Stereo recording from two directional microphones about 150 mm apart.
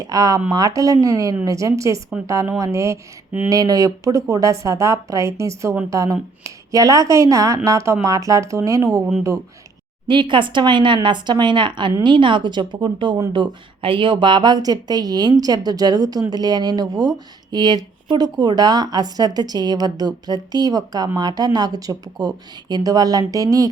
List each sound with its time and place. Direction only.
0.0 s a woman's voice: 25° right (ahead or behind)
10.1 s a woman's voice: 30° right (ahead or behind)